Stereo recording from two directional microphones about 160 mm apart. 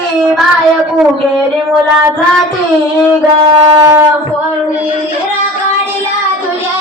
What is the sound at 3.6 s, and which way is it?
Shofar, 30° right (ahead or behind).